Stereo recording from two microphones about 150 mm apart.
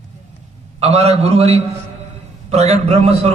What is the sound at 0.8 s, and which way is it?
A man's voice, 45° right (ahead or behind).